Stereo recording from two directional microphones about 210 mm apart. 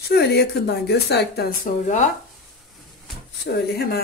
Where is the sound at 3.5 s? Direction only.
50° left (ahead or behind).